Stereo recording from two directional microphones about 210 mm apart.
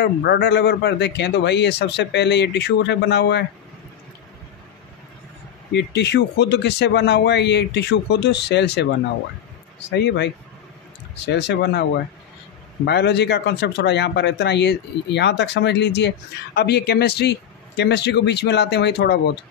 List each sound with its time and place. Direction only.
0.0 s speech: 55° left (ahead or behind)
5.7 s speech: 55° left (ahead or behind)
9.8 s speech: 55° left (ahead or behind)